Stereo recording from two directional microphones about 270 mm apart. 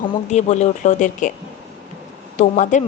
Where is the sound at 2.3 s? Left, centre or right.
Left.